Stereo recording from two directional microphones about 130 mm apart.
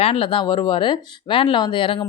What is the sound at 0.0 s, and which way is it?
A woman's voice, 45° left (ahead or behind).